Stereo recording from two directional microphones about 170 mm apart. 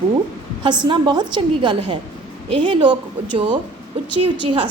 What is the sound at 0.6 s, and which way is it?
A woman's voice, 25° right (ahead or behind).